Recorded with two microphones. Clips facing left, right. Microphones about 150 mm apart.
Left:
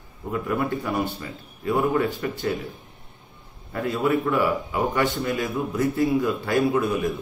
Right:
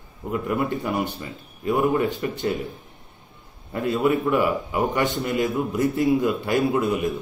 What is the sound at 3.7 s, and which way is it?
A man's voice, 20° right (ahead or behind).